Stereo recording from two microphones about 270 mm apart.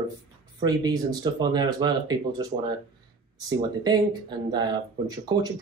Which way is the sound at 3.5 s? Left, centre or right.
Centre.